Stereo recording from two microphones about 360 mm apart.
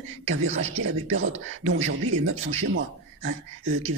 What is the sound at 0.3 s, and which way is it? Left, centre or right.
Speech, right.